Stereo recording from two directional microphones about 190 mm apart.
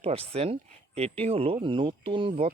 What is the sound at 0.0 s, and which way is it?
Speech, 30° right (ahead or behind).